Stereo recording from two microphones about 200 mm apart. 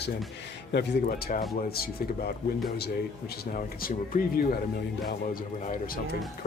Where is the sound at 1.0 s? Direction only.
40° left (ahead or behind).